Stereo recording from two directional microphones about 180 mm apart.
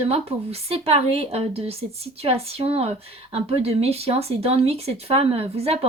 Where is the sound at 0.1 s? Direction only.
35° right (ahead or behind).